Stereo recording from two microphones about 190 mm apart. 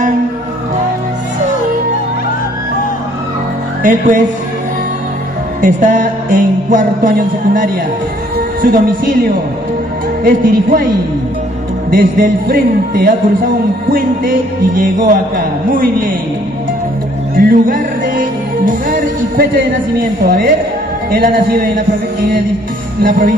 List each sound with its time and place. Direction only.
5.6 s speech: 40° right (ahead or behind)
11.9 s speech: 50° right (ahead or behind)
17.4 s speech: 50° right (ahead or behind)